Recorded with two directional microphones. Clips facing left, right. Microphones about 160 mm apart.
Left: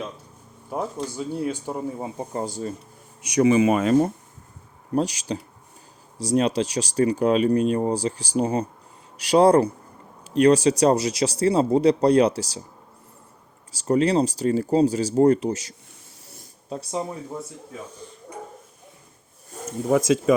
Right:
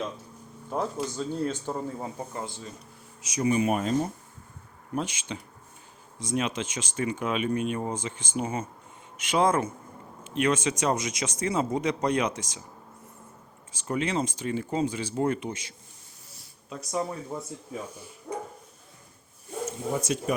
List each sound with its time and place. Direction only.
0.7 s speech: 10° left (ahead or behind)
2.3 s speech: 40° left (ahead or behind)
3.2 s speech: 65° left (ahead or behind); by 3.9 s 90° left
4.9 s speech: 35° left (ahead or behind)
13.7 s speech: 35° left (ahead or behind)
17.3 s speech: 5° left (ahead or behind)
19.9 s speech: 90° left